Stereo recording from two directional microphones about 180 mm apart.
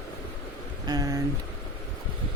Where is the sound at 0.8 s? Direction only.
20° right (ahead or behind).